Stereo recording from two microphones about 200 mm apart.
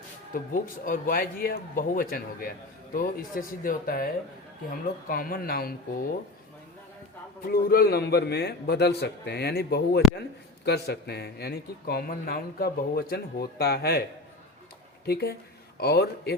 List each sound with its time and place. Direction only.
0.3 s speech: 45° left (ahead or behind)
7.4 s a man's voice: 50° left (ahead or behind)
15.0 s speech: 50° left (ahead or behind)